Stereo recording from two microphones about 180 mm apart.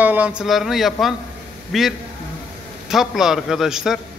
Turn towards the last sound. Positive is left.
turn(degrees=0)  # may be behind; listen again after turning